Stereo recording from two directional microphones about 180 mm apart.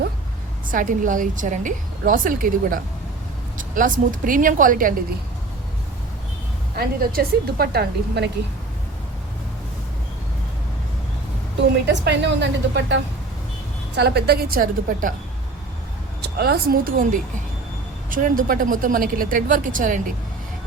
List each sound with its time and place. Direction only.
0.7 s a woman's voice: 50° right (ahead or behind)
6.7 s a woman's voice: 55° right (ahead or behind)
11.9 s a woman's voice: 75° right (ahead or behind)
14.0 s a woman's voice: 65° right (ahead or behind)
16.2 s a woman's voice: 60° right (ahead or behind)